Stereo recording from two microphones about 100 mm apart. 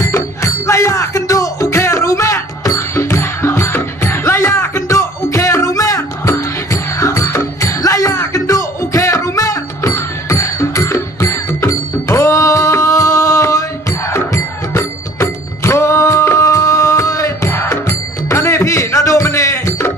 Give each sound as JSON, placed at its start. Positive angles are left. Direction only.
{"t": 0.0, "sound": "music", "side_deg": 30}